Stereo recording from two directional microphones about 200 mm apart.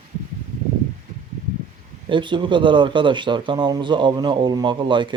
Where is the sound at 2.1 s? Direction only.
25° right (ahead or behind).